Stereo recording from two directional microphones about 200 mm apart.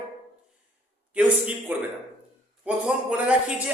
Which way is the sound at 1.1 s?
5° right (ahead or behind).